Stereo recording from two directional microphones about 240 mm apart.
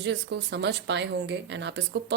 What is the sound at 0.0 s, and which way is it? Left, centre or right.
A woman's voice, right.